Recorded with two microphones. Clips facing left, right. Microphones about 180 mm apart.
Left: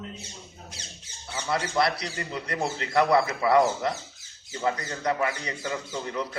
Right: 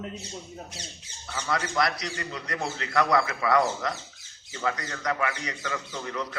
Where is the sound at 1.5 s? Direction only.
30° left (ahead or behind).